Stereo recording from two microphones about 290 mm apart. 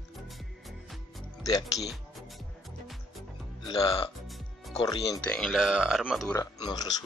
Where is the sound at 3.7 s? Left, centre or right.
Centre.